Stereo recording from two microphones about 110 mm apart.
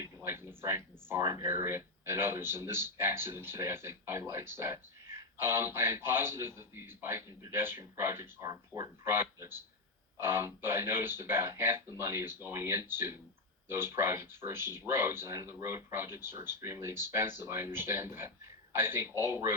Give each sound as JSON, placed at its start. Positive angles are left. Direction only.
{"t": 0.0, "sound": "speech", "side_deg": -25}
{"t": 8.4, "sound": "speech", "side_deg": -35}
{"t": 9.0, "sound": "speech", "side_deg": -20}